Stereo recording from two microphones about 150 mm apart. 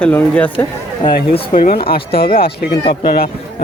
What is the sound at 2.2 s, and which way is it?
A man's voice, 90° left.